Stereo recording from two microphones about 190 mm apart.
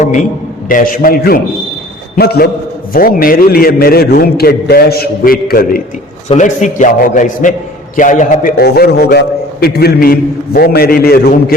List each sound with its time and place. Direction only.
0.0 s a man's voice: 40° left (ahead or behind)
6.2 s a man's voice: 40° left (ahead or behind)